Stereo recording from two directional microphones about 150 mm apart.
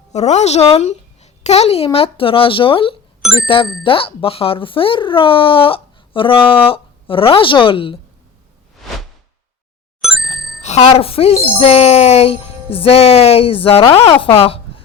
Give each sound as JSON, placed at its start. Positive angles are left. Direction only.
{"t": 0.1, "sound": "a woman's voice", "side_deg": 50}
{"t": 10.0, "sound": "bicycle bell", "side_deg": 0}
{"t": 10.6, "sound": "speech", "side_deg": 45}